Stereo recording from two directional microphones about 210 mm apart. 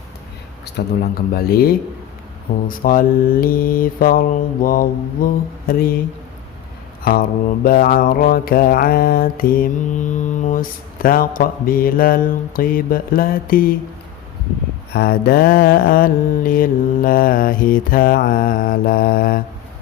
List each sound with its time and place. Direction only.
0.6 s mantra: 50° left (ahead or behind)
7.0 s mantra: 45° left (ahead or behind)
14.9 s mantra: 50° left (ahead or behind)